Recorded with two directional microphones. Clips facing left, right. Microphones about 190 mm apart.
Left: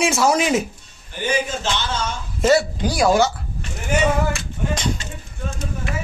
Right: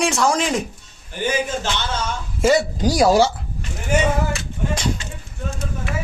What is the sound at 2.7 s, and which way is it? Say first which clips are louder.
Speech: right 2 dB; 40° right (ahead or behind).